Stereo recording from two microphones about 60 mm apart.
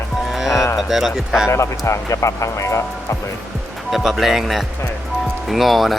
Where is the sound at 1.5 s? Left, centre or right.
Left.